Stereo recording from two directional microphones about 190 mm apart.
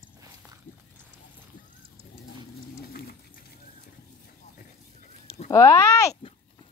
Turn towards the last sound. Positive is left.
turn(degrees=15)  # may be behind; listen again after turning